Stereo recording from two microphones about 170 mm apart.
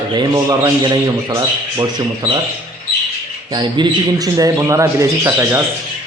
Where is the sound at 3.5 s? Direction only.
25° right (ahead or behind).